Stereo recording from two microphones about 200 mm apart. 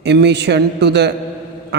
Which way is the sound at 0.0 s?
60° right (ahead or behind).